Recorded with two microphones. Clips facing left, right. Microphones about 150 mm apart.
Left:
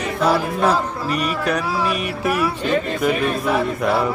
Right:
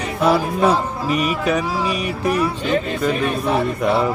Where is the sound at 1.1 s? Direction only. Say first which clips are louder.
Right 3 dB; centre (ahead or behind).